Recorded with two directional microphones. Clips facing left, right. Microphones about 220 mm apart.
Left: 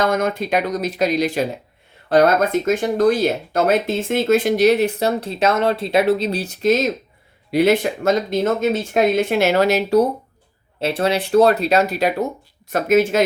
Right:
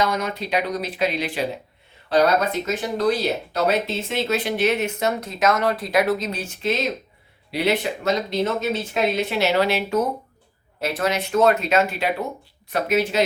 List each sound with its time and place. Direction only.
0.0 s speech: 50° left (ahead or behind)